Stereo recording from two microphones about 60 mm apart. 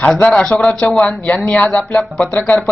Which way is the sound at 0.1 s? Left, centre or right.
Centre.